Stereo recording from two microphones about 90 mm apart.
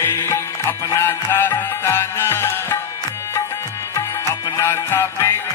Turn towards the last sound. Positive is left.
turn(degrees=30)  # may be behind; listen again after turning